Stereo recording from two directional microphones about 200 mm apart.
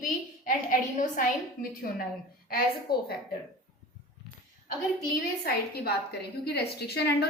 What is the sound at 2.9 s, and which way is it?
Speech, 50° left (ahead or behind).